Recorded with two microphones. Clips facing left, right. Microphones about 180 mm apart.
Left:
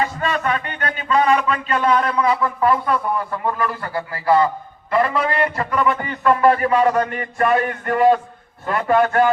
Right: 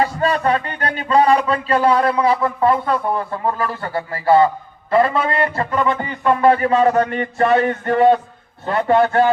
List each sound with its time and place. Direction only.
0.0 s a man's voice: 35° right (ahead or behind)